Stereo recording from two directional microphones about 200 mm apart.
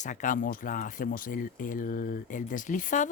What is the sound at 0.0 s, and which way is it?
Speech, 40° left (ahead or behind).